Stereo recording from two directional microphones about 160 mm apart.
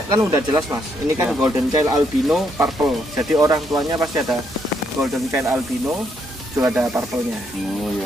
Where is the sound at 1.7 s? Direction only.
25° right (ahead or behind).